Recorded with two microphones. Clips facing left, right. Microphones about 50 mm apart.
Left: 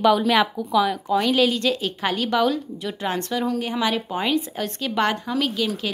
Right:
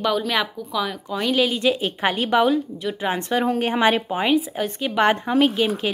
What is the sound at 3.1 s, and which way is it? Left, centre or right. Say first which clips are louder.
Speech: right 1 dB; centre.